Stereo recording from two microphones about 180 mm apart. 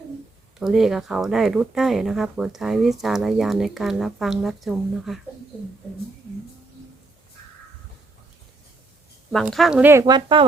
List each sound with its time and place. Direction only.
0.6 s speech: centre (ahead or behind)
9.3 s speech: centre (ahead or behind); by 10.4 s 25° right (ahead or behind)